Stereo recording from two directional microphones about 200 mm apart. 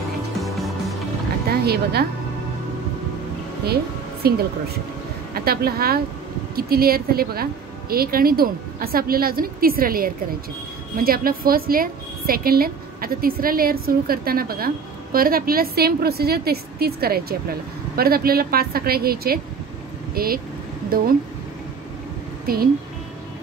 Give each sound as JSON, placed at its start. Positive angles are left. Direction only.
{"t": 0.4, "sound": "music", "side_deg": 0}
{"t": 1.5, "sound": "a woman's voice", "side_deg": -50}
{"t": 3.6, "sound": "music", "side_deg": -50}
{"t": 5.3, "sound": "a woman's voice", "side_deg": -50}
{"t": 22.5, "sound": "a woman's voice", "side_deg": -50}